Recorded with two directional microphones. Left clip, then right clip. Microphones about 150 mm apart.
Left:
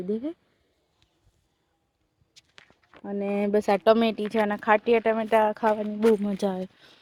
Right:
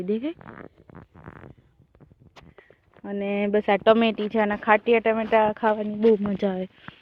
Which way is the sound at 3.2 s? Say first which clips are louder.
Right 1 dB; 30° left (ahead or behind).